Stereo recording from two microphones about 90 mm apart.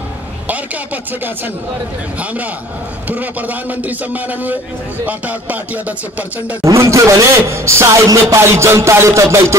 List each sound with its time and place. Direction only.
3.1 s a man's voice: 20° right (ahead or behind)
5.0 s music: 15° right (ahead or behind)
6.6 s speech: 35° right (ahead or behind)